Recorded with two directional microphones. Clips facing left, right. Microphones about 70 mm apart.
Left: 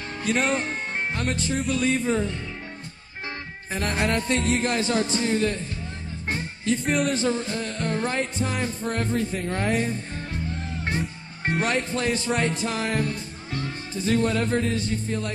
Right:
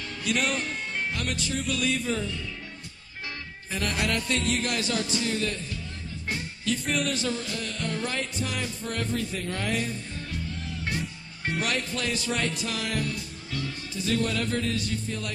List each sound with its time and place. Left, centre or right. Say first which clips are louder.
0.2 s music: left 4 dB; left
1.7 s speech: left 5 dB; left
3.7 s speech: left 4 dB; left
6.2 s music: left 4 dB; left